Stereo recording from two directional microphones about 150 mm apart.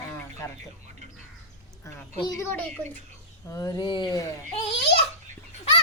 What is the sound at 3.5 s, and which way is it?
Speech, 25° left (ahead or behind).